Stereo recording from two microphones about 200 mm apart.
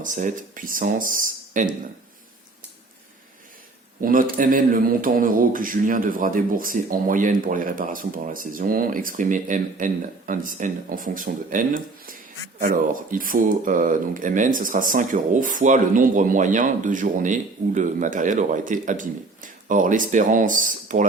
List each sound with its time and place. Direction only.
0.0 s speech: 40° right (ahead or behind)
4.0 s a man's voice: 45° right (ahead or behind)